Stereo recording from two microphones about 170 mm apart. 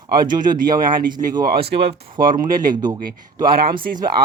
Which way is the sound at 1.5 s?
85° right.